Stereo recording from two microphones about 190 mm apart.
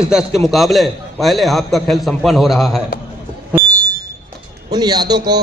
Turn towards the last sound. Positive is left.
turn(degrees=-20)  # may be behind; listen again after turning